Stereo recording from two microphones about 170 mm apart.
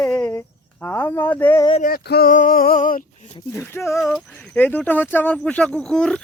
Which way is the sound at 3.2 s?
30° left (ahead or behind).